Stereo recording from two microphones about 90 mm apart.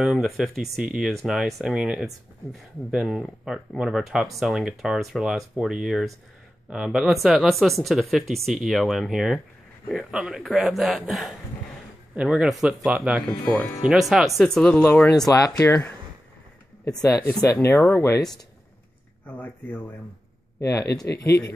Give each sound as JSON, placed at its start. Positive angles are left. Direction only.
{"t": 0.0, "sound": "speech", "side_deg": -5}
{"t": 13.5, "sound": "speech", "side_deg": 15}
{"t": 13.8, "sound": "speech", "side_deg": -5}
{"t": 14.4, "sound": "speech", "side_deg": 10}
{"t": 15.0, "sound": "speech", "side_deg": 40}
{"t": 16.8, "sound": "speech", "side_deg": 45}
{"t": 17.6, "sound": "speech", "side_deg": 25}
{"t": 19.2, "sound": "speech", "side_deg": 20}
{"t": 20.6, "sound": "speech", "side_deg": 40}